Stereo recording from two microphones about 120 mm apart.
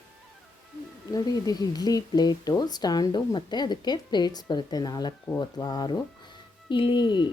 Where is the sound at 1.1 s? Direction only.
30° left (ahead or behind).